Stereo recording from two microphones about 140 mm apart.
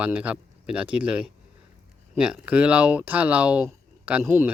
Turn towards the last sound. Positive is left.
turn(degrees=-15)  # may be behind; listen again after turning